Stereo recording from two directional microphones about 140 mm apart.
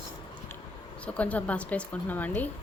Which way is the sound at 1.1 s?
10° left (ahead or behind).